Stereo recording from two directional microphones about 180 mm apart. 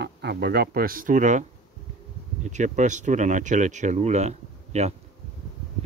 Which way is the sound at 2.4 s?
45° right (ahead or behind).